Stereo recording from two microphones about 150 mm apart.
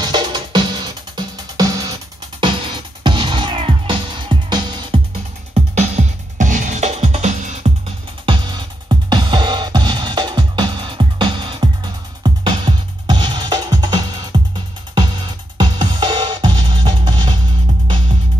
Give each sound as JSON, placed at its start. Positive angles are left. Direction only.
{"t": 0.0, "sound": "music", "side_deg": -30}
{"t": 5.5, "sound": "music", "side_deg": -50}
{"t": 8.3, "sound": "music", "side_deg": -30}
{"t": 15.5, "sound": "music", "side_deg": -30}